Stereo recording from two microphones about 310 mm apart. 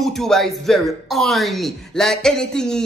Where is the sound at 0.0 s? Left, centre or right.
Centre.